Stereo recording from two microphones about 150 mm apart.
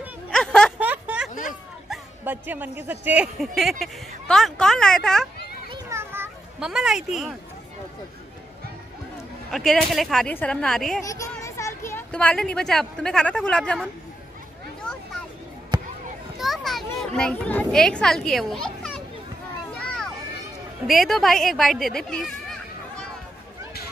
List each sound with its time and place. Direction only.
0.3 s a sound: 5° left (ahead or behind)
0.7 s a sound: 10° right (ahead or behind)
2.2 s speech: 10° right (ahead or behind); by 5.3 s 5° left (ahead or behind)
5.9 s children playing: 15° right (ahead or behind)
6.6 s speech: 5° right (ahead or behind)
9.5 s speech: centre (ahead or behind)
11.1 s a sound: 20° left (ahead or behind)
12.1 s speech: 5° left (ahead or behind)
16.3 s a child's voice: centre (ahead or behind)
20.8 s speech: centre (ahead or behind)